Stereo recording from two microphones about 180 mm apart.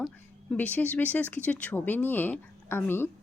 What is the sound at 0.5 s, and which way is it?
Speech, 10° left (ahead or behind).